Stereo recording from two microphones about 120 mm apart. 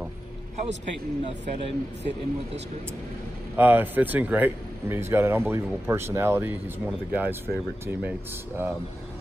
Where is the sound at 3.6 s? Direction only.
15° right (ahead or behind).